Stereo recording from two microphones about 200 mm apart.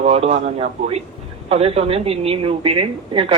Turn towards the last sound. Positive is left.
turn(degrees=-25)  # may be behind; listen again after turning